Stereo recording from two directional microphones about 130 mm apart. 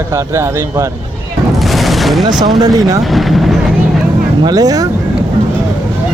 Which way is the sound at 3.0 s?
Centre (ahead or behind).